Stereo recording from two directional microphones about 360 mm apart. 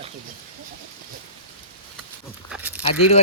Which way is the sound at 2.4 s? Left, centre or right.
Centre.